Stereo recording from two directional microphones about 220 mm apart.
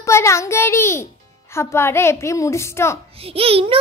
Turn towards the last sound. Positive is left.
turn(degrees=-25)  # may be behind; listen again after turning